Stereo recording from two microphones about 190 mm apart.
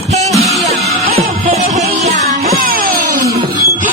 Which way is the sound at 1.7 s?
35° right (ahead or behind).